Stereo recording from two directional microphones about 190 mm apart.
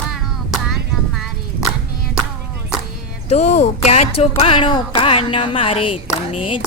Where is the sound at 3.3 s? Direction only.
35° left (ahead or behind).